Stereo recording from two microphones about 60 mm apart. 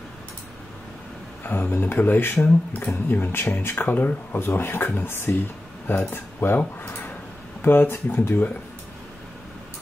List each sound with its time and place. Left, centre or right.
1.4 s speech: left
7.6 s speech: left